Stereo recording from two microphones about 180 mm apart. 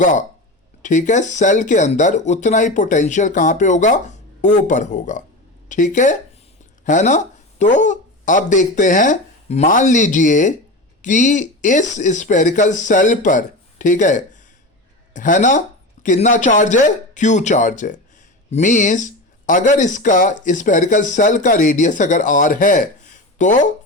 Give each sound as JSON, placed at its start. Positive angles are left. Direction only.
{"t": 0.0, "sound": "speech", "side_deg": 45}